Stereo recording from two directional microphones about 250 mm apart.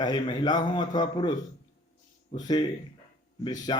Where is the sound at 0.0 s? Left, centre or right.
Centre.